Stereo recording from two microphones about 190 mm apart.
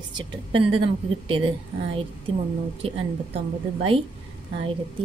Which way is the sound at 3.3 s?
30° right (ahead or behind).